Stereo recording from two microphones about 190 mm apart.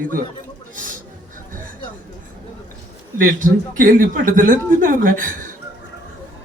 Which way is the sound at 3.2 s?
45° right (ahead or behind).